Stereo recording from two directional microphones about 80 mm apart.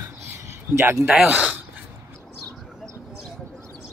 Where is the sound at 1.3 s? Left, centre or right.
Centre.